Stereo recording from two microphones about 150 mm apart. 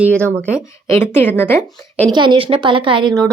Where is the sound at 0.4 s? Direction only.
15° left (ahead or behind).